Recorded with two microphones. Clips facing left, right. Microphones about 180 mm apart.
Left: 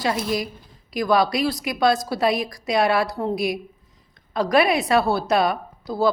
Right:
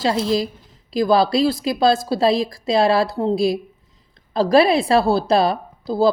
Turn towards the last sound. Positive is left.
turn(degrees=-30)  # may be behind; listen again after turning